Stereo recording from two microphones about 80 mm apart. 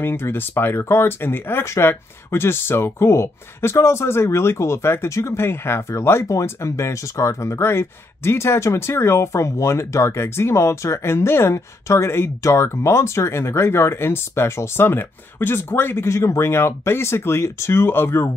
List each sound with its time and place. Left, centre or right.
0.0 s speech: left